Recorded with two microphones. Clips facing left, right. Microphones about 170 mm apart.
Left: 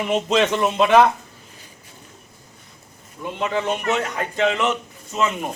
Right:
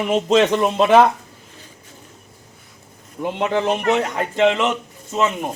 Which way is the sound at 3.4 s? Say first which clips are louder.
Right 3 dB; 30° right (ahead or behind).